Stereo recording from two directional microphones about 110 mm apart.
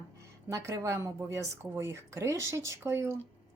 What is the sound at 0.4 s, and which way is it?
Speech, 25° right (ahead or behind).